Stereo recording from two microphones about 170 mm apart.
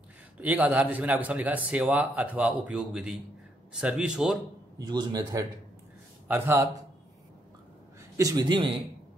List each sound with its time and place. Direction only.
0.4 s a man's voice: 10° right (ahead or behind)
4.7 s a man's voice: 25° right (ahead or behind)
6.2 s speech: 10° right (ahead or behind)
8.2 s a man's voice: 20° right (ahead or behind)